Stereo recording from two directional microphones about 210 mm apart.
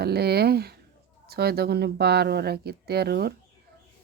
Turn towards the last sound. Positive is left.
turn(degrees=-50)  # may be behind; listen again after turning